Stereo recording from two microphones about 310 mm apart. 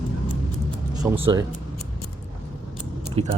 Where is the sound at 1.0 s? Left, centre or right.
Centre.